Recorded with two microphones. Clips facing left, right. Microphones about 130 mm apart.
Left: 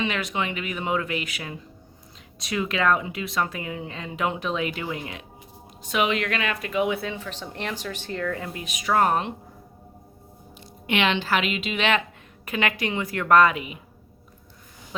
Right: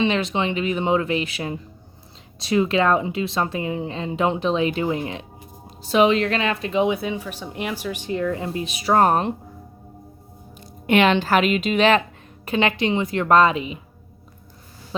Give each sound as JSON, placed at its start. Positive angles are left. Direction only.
{"t": 0.0, "sound": "speech", "side_deg": -25}
{"t": 8.4, "sound": "speech", "side_deg": -30}
{"t": 10.6, "sound": "speech", "side_deg": -45}
{"t": 12.5, "sound": "speech", "side_deg": -30}